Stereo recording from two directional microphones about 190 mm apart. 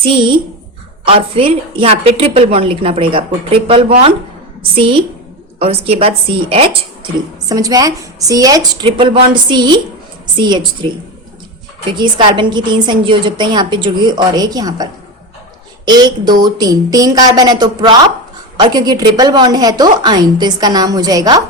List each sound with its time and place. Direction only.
0.0 s a woman's voice: 25° right (ahead or behind)
7.0 s a woman's voice: 20° right (ahead or behind)
15.9 s a woman's voice: 20° right (ahead or behind)